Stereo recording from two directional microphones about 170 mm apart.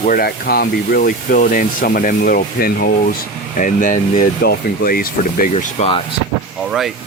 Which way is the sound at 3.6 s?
50° left (ahead or behind).